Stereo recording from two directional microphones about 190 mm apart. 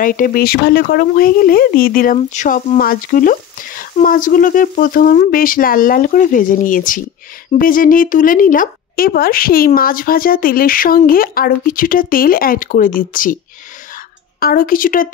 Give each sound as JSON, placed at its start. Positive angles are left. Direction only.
{"t": 0.0, "sound": "speech", "side_deg": 45}
{"t": 14.4, "sound": "speech", "side_deg": 50}